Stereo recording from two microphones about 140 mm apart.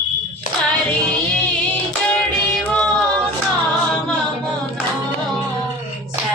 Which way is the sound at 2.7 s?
5° left (ahead or behind).